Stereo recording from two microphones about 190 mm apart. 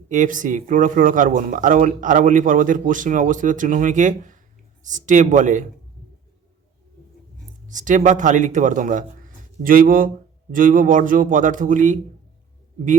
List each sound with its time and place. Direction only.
0.1 s speech: 45° right (ahead or behind)
7.7 s a man's voice: 40° right (ahead or behind)